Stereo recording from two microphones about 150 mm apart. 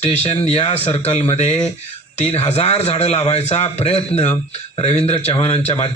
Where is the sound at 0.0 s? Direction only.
45° left (ahead or behind).